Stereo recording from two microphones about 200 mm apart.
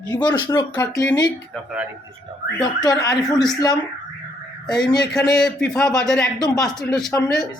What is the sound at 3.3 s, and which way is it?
Speech, 20° left (ahead or behind).